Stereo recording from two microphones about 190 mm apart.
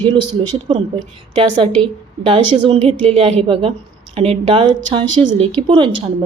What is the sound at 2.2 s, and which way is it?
A woman's voice, 25° right (ahead or behind).